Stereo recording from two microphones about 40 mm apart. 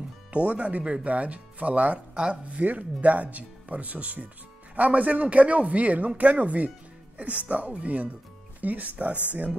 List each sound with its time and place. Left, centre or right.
0.3 s speech: right